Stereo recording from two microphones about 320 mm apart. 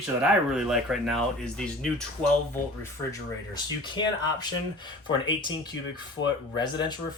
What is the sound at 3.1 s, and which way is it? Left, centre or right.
Speech, centre.